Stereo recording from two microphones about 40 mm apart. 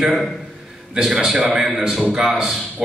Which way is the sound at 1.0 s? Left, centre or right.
Right.